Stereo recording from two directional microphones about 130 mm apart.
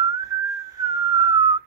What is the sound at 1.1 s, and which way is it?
Whistling, 25° right (ahead or behind).